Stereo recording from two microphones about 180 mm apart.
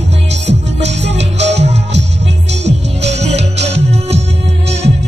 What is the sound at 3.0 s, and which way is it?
Music, 35° right (ahead or behind).